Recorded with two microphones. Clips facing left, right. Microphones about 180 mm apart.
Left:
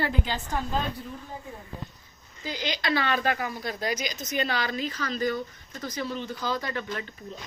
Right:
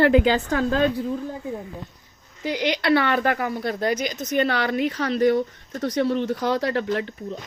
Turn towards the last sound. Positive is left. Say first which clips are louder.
# right 9 dB
turn(degrees=-65)  # may be behind; listen again after turning